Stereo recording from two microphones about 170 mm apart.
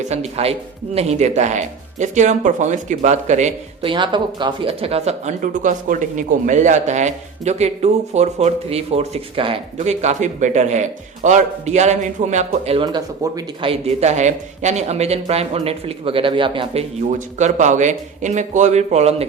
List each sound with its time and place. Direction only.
0.0 s a man's voice: 40° right (ahead or behind)
3.8 s a man's voice: 30° right (ahead or behind)
17.1 s speech: 45° right (ahead or behind)